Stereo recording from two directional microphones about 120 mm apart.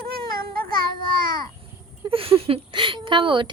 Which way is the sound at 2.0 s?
50° right (ahead or behind).